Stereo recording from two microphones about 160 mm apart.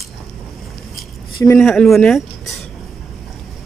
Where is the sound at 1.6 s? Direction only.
5° left (ahead or behind).